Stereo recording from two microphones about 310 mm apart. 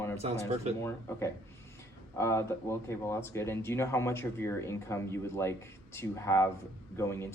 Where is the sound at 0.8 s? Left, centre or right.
Centre.